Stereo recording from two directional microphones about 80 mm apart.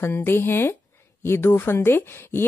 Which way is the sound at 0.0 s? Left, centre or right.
Left.